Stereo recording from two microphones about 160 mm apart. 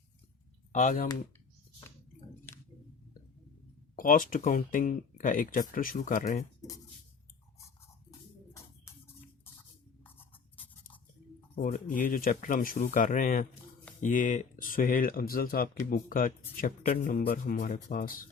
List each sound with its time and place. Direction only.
0.7 s speech: 50° left (ahead or behind)
3.9 s speech: 60° left (ahead or behind)
11.6 s speech: 55° left (ahead or behind)